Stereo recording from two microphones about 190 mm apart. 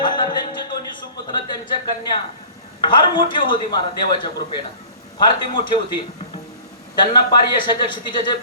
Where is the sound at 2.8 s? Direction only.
25° left (ahead or behind).